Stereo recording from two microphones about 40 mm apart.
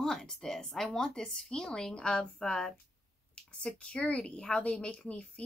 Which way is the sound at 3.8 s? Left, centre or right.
Left.